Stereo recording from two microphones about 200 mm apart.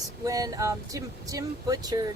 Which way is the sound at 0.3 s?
20° right (ahead or behind).